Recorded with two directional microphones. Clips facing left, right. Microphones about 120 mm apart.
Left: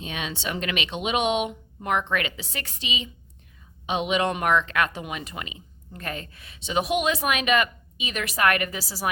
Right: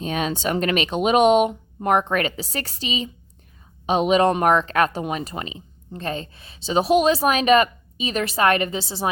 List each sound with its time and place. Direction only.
0.0 s speech: 40° right (ahead or behind); by 9.0 s 25° right (ahead or behind)